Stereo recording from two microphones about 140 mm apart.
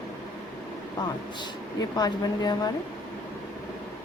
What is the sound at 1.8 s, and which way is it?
Speech, 30° left (ahead or behind).